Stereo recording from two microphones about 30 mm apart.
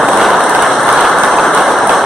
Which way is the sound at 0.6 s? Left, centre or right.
Centre.